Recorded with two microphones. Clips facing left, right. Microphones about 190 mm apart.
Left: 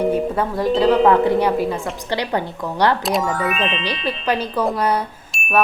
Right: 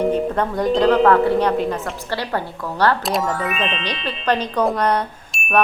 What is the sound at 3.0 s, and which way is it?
A woman's voice, centre (ahead or behind).